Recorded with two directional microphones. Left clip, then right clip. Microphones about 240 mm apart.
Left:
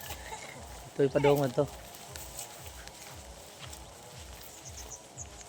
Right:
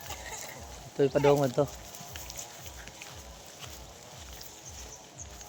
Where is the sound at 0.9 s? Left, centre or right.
Centre.